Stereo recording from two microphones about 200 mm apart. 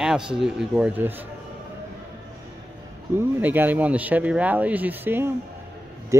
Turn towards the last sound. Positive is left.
turn(degrees=-15)  # may be behind; listen again after turning